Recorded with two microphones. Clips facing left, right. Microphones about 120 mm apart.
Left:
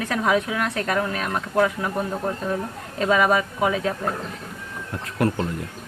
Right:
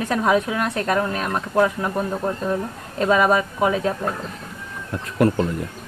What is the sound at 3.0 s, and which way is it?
Speech, 40° right (ahead or behind).